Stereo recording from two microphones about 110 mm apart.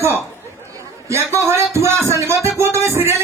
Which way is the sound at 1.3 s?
25° right (ahead or behind).